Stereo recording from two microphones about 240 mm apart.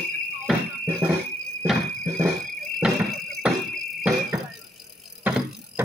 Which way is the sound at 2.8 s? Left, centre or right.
Centre.